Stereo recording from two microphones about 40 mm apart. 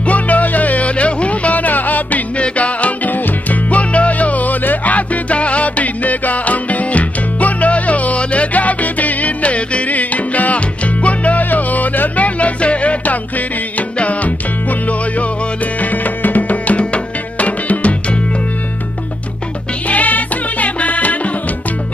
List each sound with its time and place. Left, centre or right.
0.0 s music: left
19.9 s music: left